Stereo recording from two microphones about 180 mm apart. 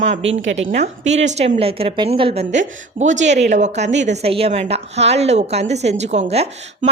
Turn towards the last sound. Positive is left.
turn(degrees=-35)  # may be behind; listen again after turning